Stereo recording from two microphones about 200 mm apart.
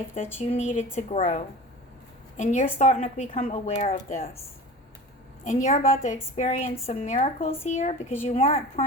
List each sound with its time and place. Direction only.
0.3 s speech: 30° left (ahead or behind)
2.4 s speech: 35° left (ahead or behind)
5.6 s speech: 40° left (ahead or behind)